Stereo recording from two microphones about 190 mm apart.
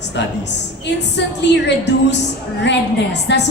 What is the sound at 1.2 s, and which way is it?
Speech, 70° left (ahead or behind).